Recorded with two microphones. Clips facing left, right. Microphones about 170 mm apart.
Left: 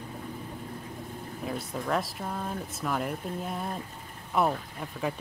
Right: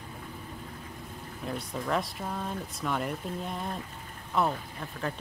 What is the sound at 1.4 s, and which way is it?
Speech, centre (ahead or behind).